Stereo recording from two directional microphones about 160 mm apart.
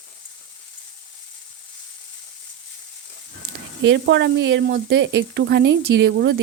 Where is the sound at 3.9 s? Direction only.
90° right.